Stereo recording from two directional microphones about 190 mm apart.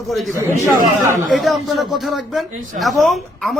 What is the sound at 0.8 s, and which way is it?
Speech, 45° right (ahead or behind).